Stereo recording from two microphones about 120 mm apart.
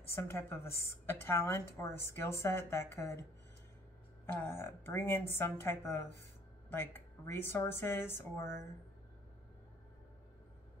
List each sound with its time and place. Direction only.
0.1 s a woman's voice: 20° left (ahead or behind)
4.3 s a woman's voice: 20° left (ahead or behind)